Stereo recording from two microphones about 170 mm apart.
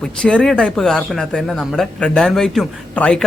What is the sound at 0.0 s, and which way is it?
Speech, 5° left (ahead or behind).